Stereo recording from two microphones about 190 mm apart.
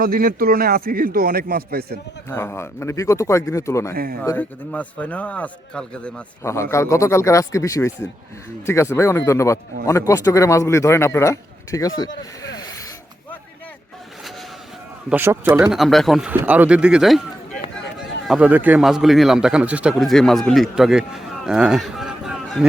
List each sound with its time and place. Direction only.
0.0 s speech: 50° right (ahead or behind)
2.3 s a man's voice: 15° left (ahead or behind)
3.9 s speech: 50° right (ahead or behind)
4.2 s a man's voice: 10° left (ahead or behind)
15.1 s a man's voice: 10° right (ahead or behind)
18.3 s a man's voice: 5° right (ahead or behind)